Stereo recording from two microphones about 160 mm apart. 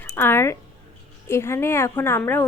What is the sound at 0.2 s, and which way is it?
A woman's voice, 15° left (ahead or behind).